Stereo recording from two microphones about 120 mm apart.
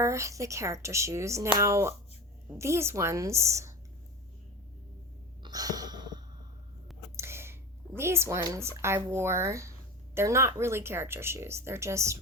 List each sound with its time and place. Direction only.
0.0 s speech: 25° right (ahead or behind)
5.4 s a sound: 30° right (ahead or behind)
7.2 s speech: 20° right (ahead or behind)